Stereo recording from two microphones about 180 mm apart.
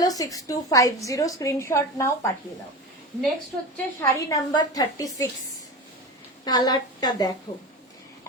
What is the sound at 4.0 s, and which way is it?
A woman's voice, 20° left (ahead or behind).